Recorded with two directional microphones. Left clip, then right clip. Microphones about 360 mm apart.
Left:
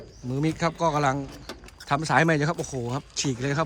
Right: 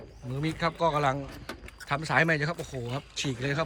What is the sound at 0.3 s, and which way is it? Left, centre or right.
Speech, centre.